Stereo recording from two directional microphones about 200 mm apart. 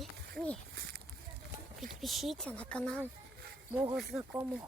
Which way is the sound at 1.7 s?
Centre (ahead or behind).